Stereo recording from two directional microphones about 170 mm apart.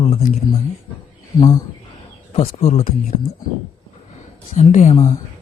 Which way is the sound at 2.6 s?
45° left (ahead or behind).